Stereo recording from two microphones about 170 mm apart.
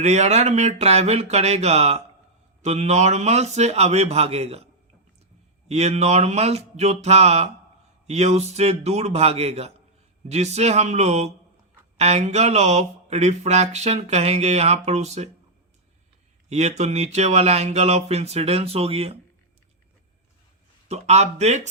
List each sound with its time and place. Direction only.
0.0 s speech: 40° right (ahead or behind)
16.5 s speech: 40° right (ahead or behind)
20.8 s speech: 40° right (ahead or behind)